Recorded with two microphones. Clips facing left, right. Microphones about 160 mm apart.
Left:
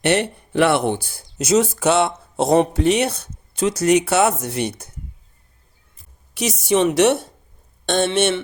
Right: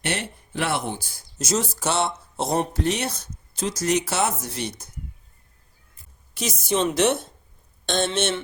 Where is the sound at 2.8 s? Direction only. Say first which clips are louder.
Left 7 dB; 65° left (ahead or behind).